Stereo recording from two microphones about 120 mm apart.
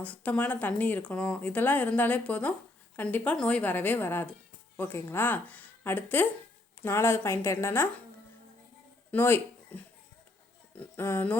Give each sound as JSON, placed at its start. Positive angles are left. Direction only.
{"t": 0.0, "sound": "a woman's voice", "side_deg": 15}
{"t": 9.1, "sound": "speech", "side_deg": 15}